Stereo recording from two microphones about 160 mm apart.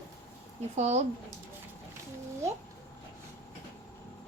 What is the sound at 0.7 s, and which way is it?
Speech, 45° right (ahead or behind).